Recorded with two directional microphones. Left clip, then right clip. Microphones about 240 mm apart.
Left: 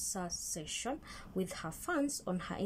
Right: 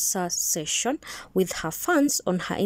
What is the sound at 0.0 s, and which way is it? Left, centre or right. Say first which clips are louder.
A woman's voice: right 14 dB; right.